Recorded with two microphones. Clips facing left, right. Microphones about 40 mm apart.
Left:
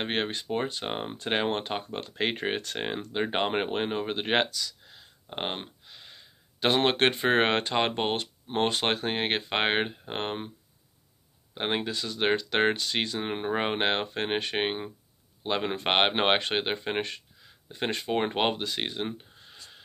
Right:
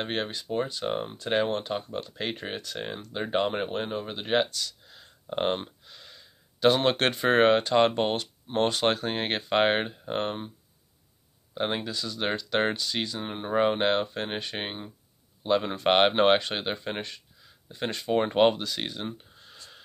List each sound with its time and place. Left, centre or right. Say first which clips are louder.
0.0 s speech: left 1 dB; left
5.3 s speech: right 6 dB; centre
5.6 s a sound: right 1 dB; left
7.7 s speech: right 4 dB; left
11.5 s speech: even; left
13.5 s speech: right 4 dB; left
18.1 s speech: right 6 dB; left